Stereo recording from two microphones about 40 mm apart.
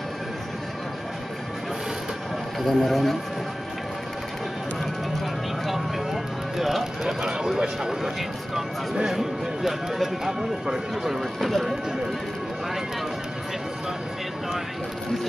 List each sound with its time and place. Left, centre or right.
2.6 s speech: centre
5.2 s vehicle: centre
6.6 s speech: centre
7.1 s speech: centre